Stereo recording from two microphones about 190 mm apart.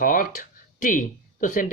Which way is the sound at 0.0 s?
45° left (ahead or behind).